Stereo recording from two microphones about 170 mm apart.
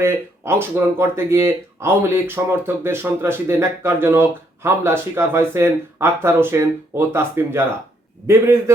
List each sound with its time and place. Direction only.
0.0 s speech: 15° right (ahead or behind)